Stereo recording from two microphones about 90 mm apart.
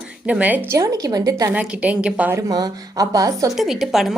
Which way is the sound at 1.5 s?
15° right (ahead or behind).